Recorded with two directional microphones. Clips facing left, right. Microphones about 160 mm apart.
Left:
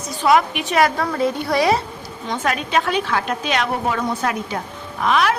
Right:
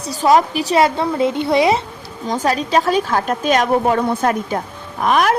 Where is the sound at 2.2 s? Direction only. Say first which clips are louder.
Right 4 dB; 35° right (ahead or behind).